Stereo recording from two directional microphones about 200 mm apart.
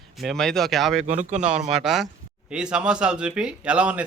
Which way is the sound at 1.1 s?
35° right (ahead or behind).